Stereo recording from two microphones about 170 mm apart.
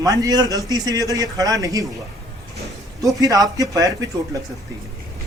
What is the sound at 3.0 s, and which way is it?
Speech, 20° right (ahead or behind).